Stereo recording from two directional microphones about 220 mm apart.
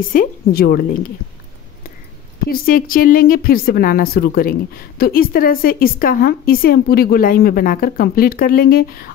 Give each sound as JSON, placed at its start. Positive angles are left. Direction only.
{"t": 0.1, "sound": "a woman's voice", "side_deg": 40}
{"t": 2.4, "sound": "speech", "side_deg": 40}